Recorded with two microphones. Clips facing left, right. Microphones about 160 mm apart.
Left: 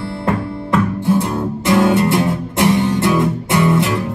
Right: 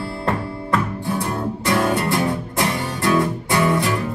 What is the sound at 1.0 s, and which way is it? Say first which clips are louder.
Music: left 6 dB; 20° left (ahead or behind).